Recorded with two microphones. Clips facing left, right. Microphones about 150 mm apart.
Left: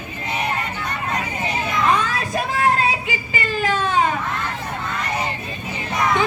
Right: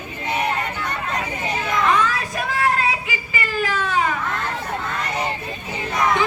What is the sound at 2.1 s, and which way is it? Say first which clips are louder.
Child singing: left 2 dB; 25° left (ahead or behind).